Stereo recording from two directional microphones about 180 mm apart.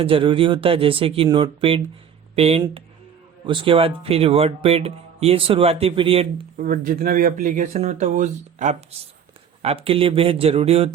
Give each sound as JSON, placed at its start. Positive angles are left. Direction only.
{"t": 0.0, "sound": "speech", "side_deg": -30}
{"t": 6.6, "sound": "speech", "side_deg": -50}